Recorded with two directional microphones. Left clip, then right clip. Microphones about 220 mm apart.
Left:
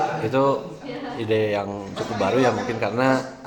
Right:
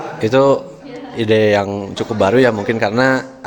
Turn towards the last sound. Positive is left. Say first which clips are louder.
# right 7 dB
turn(degrees=-45)  # may be behind; listen again after turning